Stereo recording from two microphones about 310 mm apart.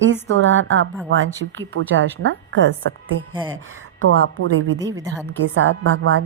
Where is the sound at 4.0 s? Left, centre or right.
Right.